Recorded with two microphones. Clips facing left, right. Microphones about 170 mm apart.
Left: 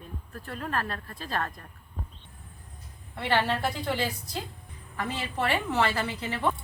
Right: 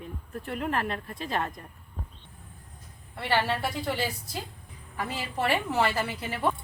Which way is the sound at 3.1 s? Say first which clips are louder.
Left 1 dB; 5° right (ahead or behind).